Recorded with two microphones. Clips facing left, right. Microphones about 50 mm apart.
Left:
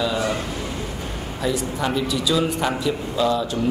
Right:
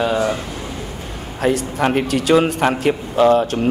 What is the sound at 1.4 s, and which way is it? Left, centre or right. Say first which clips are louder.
A man's voice: right 6 dB; right.